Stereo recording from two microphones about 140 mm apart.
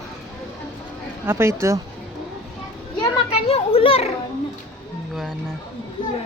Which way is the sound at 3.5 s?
45° left (ahead or behind).